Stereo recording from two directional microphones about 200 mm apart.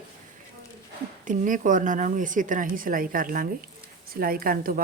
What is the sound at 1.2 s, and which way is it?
A woman's voice, 40° right (ahead or behind).